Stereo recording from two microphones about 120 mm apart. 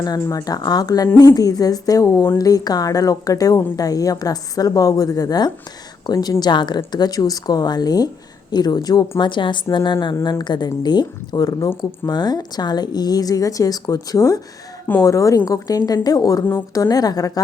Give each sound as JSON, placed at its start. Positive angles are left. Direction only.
{"t": 0.3, "sound": "speech", "side_deg": 30}